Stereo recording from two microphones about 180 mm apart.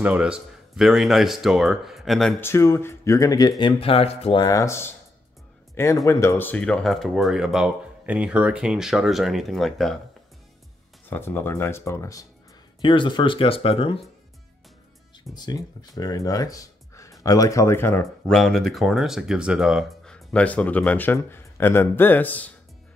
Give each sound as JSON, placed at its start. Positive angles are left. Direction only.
{"t": 0.0, "sound": "speech", "side_deg": -5}
{"t": 2.4, "sound": "speech", "side_deg": 15}
{"t": 6.0, "sound": "speech", "side_deg": 15}
{"t": 11.1, "sound": "speech", "side_deg": 10}
{"t": 12.8, "sound": "speech", "side_deg": 25}
{"t": 15.3, "sound": "speech", "side_deg": 20}